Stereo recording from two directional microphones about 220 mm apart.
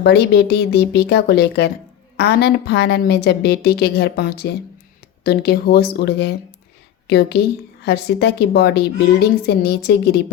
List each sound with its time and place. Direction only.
0.0 s a woman's voice: 50° left (ahead or behind)